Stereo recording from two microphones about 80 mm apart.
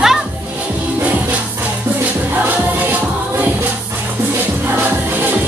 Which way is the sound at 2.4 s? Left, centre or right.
Right.